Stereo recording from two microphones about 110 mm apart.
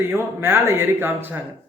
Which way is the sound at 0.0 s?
20° right (ahead or behind).